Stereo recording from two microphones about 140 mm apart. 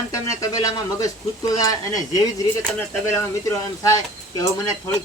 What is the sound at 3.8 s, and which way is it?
Speech, 25° left (ahead or behind).